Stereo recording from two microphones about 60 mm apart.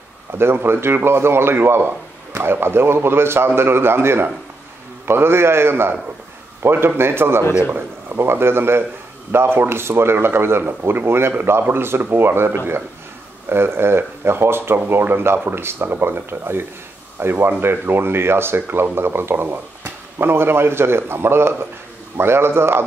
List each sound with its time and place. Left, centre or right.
0.3 s a man's voice: right